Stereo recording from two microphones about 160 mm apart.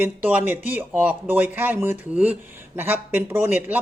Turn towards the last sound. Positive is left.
turn(degrees=-15)  # may be behind; listen again after turning